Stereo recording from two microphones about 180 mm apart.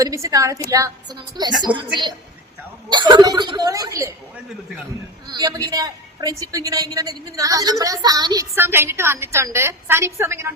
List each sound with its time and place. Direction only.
0.0 s a woman's voice: 20° right (ahead or behind)
1.6 s a woman's voice: 25° right (ahead or behind)
5.3 s a woman's voice: 20° right (ahead or behind)